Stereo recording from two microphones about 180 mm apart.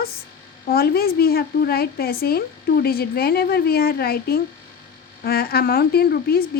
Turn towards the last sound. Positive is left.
turn(degrees=60)  # may be behind; listen again after turning